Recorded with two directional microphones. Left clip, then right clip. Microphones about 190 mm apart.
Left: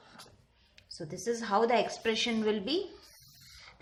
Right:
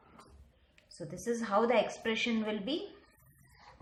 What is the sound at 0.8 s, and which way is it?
A woman's voice, 10° left (ahead or behind).